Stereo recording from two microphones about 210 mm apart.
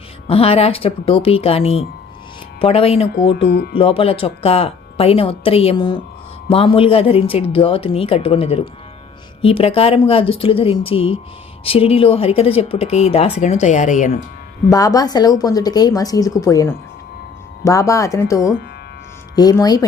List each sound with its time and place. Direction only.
0.3 s speech: 30° left (ahead or behind)
3.4 s speech: 50° left (ahead or behind)
3.8 s speech: 25° left (ahead or behind)
14.7 s a woman's voice: 15° left (ahead or behind)